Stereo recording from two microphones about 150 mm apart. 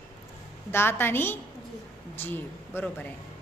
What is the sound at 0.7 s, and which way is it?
A woman's voice, 15° left (ahead or behind).